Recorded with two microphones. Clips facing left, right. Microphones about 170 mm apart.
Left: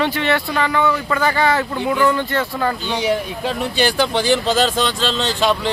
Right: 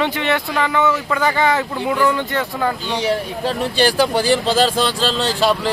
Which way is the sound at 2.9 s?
30° right (ahead or behind).